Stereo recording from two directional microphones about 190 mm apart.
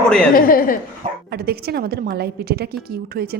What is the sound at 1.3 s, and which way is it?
A woman's voice, 55° right (ahead or behind).